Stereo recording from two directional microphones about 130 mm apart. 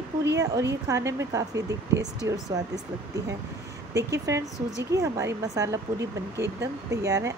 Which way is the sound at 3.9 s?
25° right (ahead or behind).